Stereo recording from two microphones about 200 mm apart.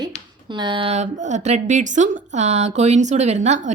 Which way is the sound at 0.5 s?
25° right (ahead or behind).